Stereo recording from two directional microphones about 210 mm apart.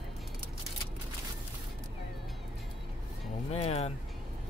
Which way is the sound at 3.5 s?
30° left (ahead or behind).